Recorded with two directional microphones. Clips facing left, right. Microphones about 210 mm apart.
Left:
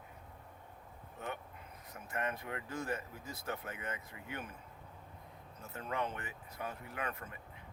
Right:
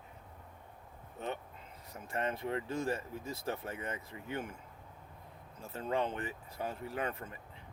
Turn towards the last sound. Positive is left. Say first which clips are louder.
# right 4 dB
turn(degrees=-30)  # may be behind; listen again after turning